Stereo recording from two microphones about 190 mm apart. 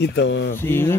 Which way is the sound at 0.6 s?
10° left (ahead or behind).